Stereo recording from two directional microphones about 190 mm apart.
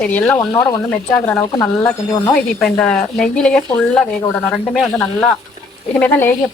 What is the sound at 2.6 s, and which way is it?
Speech, 5° left (ahead or behind).